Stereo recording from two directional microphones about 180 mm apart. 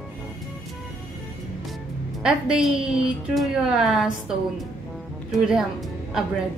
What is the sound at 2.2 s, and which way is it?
A woman's voice, 5° right (ahead or behind).